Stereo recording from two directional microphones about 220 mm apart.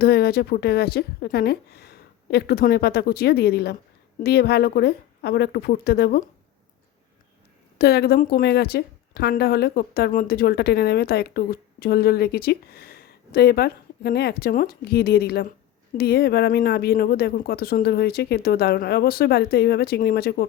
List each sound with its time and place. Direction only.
0.0 s a woman's voice: 45° left (ahead or behind)
7.8 s a woman's voice: 45° left (ahead or behind)